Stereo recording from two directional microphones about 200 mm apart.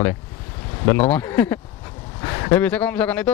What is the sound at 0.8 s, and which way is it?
Speech, 10° left (ahead or behind).